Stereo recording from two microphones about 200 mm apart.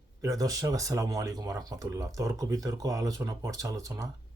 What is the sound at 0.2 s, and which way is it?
Speech, 15° right (ahead or behind).